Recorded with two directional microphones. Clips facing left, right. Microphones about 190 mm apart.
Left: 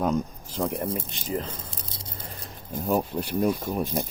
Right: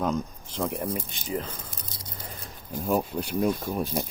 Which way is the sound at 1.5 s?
25° left (ahead or behind).